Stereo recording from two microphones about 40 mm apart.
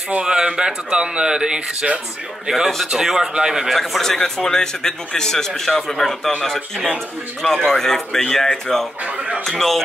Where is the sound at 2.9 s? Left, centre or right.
Centre.